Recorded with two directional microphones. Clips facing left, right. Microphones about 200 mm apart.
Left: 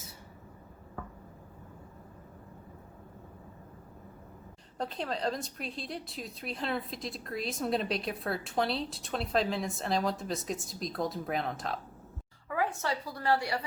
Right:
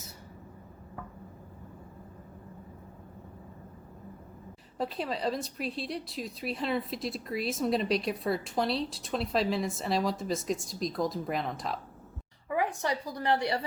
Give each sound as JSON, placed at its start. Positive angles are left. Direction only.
{"t": 4.8, "sound": "a woman's voice", "side_deg": -5}
{"t": 12.5, "sound": "a woman's voice", "side_deg": -15}